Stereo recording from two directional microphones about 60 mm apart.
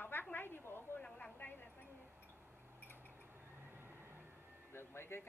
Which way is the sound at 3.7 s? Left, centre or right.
Right.